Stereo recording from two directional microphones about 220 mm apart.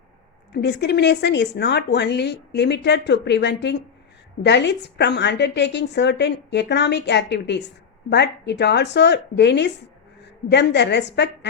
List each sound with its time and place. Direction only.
0.5 s speech: 50° left (ahead or behind)